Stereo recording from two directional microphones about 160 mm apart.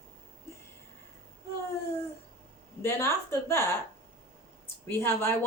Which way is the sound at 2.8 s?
15° left (ahead or behind).